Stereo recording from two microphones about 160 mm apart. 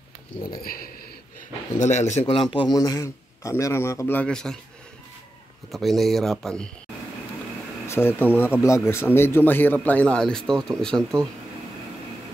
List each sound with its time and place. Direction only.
0.6 s speech: 65° left (ahead or behind)
1.8 s a man's voice: 45° left (ahead or behind)
2.5 s a man's voice: 25° left (ahead or behind); by 4.6 s 5° left (ahead or behind)
5.7 s speech: centre (ahead or behind)
7.8 s air conditioning: 15° left (ahead or behind)
8.2 s a man's voice: 10° left (ahead or behind)